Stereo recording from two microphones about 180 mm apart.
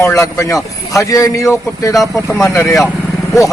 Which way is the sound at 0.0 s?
15° left (ahead or behind).